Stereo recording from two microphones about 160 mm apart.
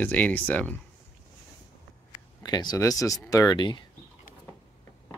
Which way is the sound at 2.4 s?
25° left (ahead or behind).